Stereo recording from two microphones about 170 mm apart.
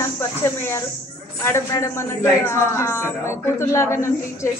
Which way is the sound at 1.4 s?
15° left (ahead or behind).